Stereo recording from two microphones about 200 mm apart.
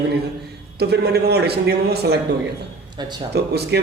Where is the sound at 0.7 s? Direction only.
55° right (ahead or behind).